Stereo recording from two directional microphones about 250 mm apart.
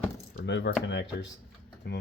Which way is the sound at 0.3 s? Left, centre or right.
Left.